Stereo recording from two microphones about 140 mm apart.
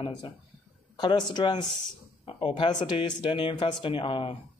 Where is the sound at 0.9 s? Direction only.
30° left (ahead or behind).